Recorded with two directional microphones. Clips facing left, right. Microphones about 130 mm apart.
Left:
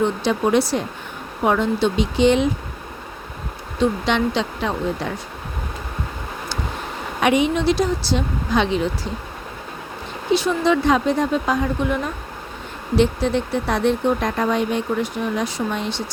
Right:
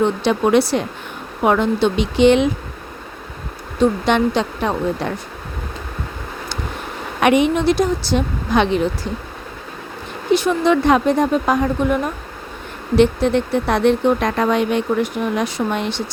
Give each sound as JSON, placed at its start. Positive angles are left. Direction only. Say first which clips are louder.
{"t": 0.3, "sound": "speech", "louder": "right 3 dB", "side_deg": -70}
{"t": 4.0, "sound": "a woman's voice", "louder": "right 4 dB", "side_deg": -50}
{"t": 7.2, "sound": "speech", "louder": "right 3 dB", "side_deg": -60}
{"t": 10.3, "sound": "a woman's voice", "louder": "right 3 dB", "side_deg": -55}
{"t": 13.0, "sound": "speech", "louder": "right 4 dB", "side_deg": -60}